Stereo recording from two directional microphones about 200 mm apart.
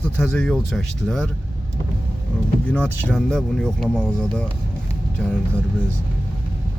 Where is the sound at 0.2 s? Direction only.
5° left (ahead or behind).